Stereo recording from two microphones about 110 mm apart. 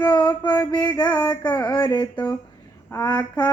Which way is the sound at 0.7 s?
40° left (ahead or behind).